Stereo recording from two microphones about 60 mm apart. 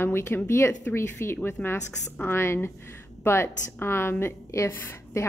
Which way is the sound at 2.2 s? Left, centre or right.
Left.